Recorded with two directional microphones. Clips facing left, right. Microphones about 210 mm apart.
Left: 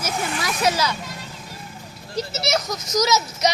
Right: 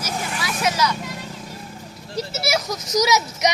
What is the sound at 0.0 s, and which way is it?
Vehicle, 45° left (ahead or behind).